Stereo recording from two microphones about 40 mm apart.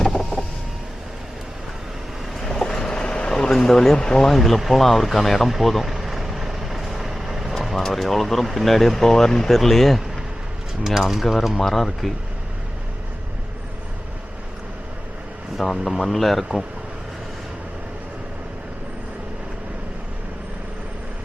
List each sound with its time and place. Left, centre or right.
2.4 s vehicle: centre
3.7 s speech: centre
4.3 s speech: centre
5.6 s vehicle: centre
7.9 s speech: centre
10.8 s speech: centre
11.6 s speech: centre
15.5 s speech: centre